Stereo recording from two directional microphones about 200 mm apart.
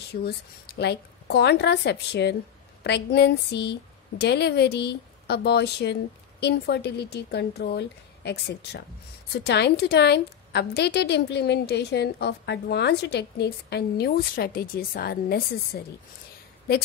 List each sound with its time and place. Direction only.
0.1 s a woman's voice: 55° left (ahead or behind)